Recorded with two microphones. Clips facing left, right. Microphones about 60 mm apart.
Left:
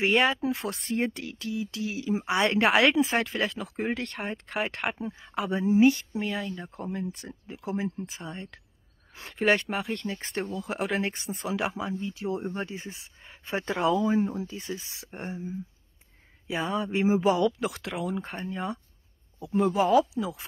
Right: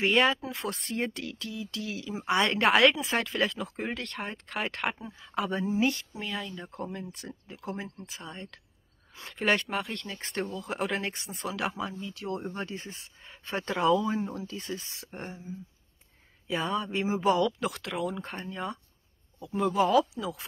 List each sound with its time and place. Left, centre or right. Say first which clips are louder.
0.0 s speech: left 1 dB; centre
0.4 s a sound: left 8 dB; left
1.0 s speech: left 3 dB; centre
1.4 s a sound: left 8 dB; centre
2.2 s speech: even; centre
3.9 s speech: left 4 dB; centre
11.1 s a sound: left 4 dB; centre
11.6 s speech: left 2 dB; centre
14.1 s speech: left 6 dB; left
16.4 s speech: left 1 dB; centre